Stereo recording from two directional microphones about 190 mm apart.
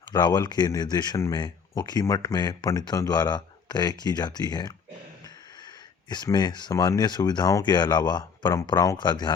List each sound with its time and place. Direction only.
0.1 s speech: 20° left (ahead or behind)
6.1 s speech: 20° left (ahead or behind)